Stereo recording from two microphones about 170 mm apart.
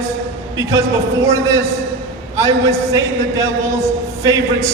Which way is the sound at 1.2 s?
20° right (ahead or behind).